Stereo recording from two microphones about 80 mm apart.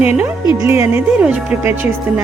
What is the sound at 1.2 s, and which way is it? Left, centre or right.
Speech, centre.